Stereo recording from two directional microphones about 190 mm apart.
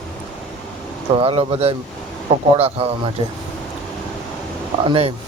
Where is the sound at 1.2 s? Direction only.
30° right (ahead or behind).